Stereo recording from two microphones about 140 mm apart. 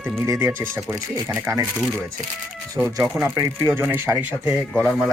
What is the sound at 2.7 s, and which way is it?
Speech, 15° right (ahead or behind).